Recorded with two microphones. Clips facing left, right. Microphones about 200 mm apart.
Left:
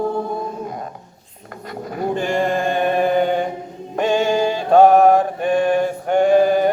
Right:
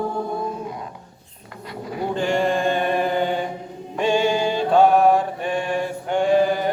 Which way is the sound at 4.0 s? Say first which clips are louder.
Left 2 dB; 45° left (ahead or behind).